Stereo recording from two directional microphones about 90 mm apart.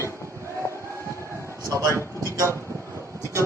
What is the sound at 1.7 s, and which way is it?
A man's voice, 35° right (ahead or behind).